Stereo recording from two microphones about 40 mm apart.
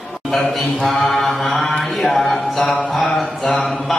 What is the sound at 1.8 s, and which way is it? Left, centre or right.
Music, centre.